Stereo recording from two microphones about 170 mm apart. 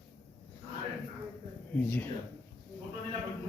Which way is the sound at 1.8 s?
10° left (ahead or behind).